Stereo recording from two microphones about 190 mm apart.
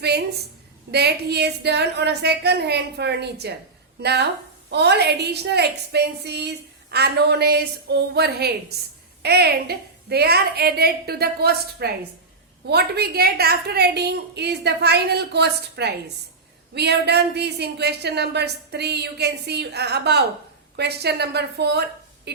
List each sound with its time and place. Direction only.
0.9 s a woman's voice: 60° right (ahead or behind)